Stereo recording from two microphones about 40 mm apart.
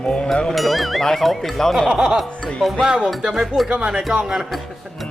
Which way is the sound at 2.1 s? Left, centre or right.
Centre.